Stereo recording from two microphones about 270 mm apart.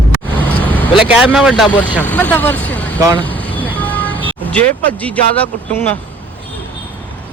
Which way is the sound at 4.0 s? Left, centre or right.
Centre.